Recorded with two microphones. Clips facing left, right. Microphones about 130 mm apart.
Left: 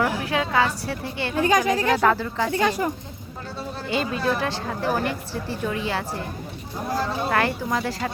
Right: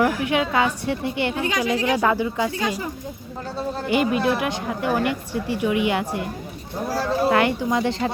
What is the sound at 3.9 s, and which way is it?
A woman's voice, 15° right (ahead or behind).